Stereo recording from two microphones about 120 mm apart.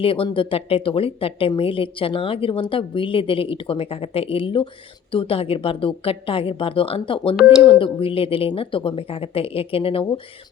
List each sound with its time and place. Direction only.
0.0 s speech: 50° left (ahead or behind)